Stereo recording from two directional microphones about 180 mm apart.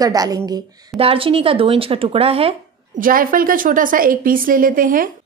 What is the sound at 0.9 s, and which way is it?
Speech, 30° right (ahead or behind).